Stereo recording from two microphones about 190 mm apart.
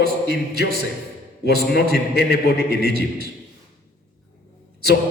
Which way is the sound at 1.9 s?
60° left (ahead or behind).